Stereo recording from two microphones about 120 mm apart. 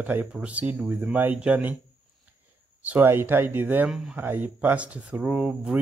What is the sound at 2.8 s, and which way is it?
Speech, 15° right (ahead or behind).